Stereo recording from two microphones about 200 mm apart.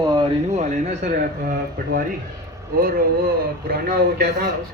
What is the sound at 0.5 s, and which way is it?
Speech, 35° right (ahead or behind).